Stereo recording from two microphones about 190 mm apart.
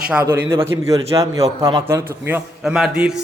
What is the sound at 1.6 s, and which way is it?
Speech, 25° right (ahead or behind).